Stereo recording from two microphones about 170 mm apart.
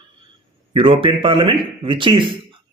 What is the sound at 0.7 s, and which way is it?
A man's voice, 30° right (ahead or behind).